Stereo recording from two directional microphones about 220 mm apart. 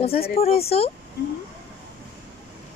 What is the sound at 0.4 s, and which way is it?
Speech, 25° left (ahead or behind).